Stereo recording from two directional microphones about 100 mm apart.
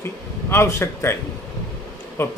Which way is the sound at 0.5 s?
25° left (ahead or behind).